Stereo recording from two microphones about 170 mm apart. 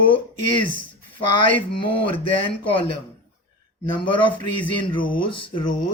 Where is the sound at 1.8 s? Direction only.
30° left (ahead or behind).